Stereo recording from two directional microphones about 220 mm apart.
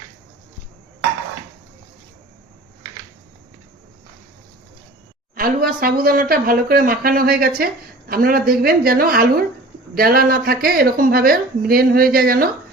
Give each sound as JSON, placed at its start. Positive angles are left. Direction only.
{"t": 5.3, "sound": "a woman's voice", "side_deg": -40}